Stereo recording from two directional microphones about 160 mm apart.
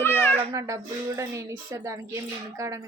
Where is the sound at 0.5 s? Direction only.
20° right (ahead or behind).